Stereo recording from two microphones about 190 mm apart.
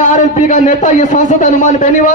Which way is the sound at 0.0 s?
40° left (ahead or behind).